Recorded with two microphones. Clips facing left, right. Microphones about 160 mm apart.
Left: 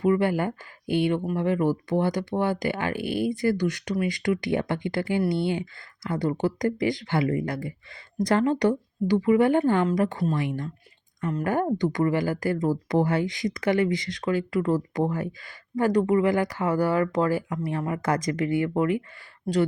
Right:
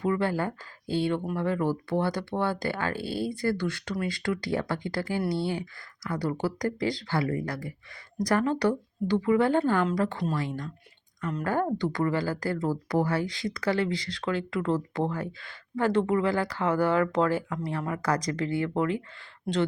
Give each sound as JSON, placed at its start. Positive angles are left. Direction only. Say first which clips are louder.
{"t": 0.0, "sound": "speech", "louder": "left 4 dB", "side_deg": 15}
{"t": 17.7, "sound": "speech", "louder": "left 2 dB", "side_deg": 15}